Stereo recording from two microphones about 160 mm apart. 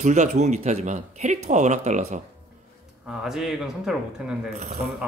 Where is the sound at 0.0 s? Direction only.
45° right (ahead or behind).